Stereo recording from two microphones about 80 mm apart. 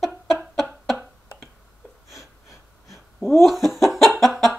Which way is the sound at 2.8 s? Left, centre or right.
Centre.